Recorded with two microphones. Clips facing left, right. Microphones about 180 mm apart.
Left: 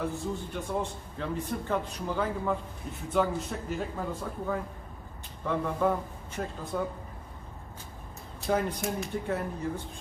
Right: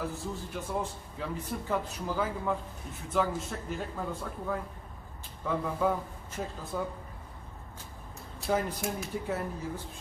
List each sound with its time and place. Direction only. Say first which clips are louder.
0.0 s a man's voice: left 3 dB; centre (ahead or behind)
8.4 s a man's voice: left 2 dB; 5° right (ahead or behind)